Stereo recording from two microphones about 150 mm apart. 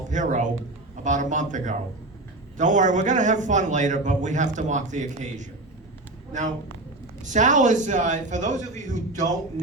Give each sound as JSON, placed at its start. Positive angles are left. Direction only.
{"t": 0.1, "sound": "a man's voice", "side_deg": -55}
{"t": 7.2, "sound": "a man's voice", "side_deg": -55}